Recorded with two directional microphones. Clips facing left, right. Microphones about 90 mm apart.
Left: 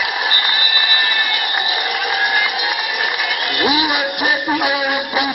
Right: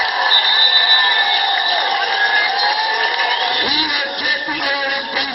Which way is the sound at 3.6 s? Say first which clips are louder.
Left 4 dB; 20° left (ahead or behind).